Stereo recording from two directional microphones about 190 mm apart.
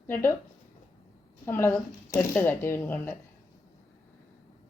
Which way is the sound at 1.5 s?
15° left (ahead or behind).